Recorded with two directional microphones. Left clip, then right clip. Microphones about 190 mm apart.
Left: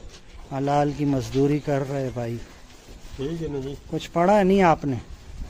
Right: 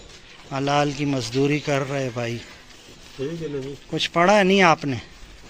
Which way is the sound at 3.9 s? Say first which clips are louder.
Right 2 dB; 5° left (ahead or behind).